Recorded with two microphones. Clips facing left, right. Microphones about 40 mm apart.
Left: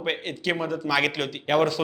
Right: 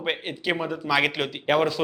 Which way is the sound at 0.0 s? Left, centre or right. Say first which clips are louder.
Even; centre.